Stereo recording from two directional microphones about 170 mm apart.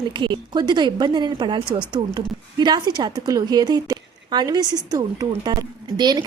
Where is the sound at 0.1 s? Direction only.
25° right (ahead or behind).